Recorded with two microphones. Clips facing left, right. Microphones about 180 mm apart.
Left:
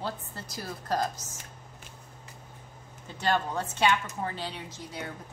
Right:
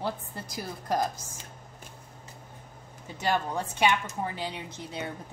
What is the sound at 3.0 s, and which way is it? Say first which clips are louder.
A woman's voice: even; 10° right (ahead or behind).